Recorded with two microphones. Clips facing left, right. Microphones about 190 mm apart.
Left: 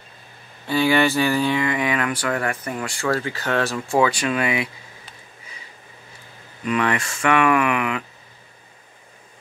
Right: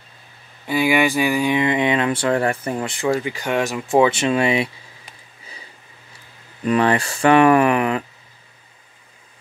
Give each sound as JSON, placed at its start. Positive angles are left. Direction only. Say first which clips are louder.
{"t": 0.7, "sound": "speech", "louder": "even", "side_deg": -10}
{"t": 6.6, "sound": "speech", "louder": "right 5 dB", "side_deg": -35}